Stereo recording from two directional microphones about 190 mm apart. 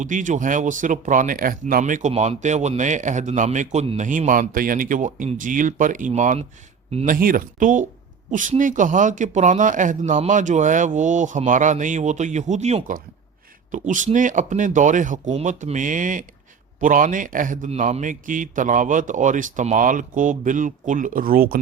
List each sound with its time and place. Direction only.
0.0 s a man's voice: 40° right (ahead or behind)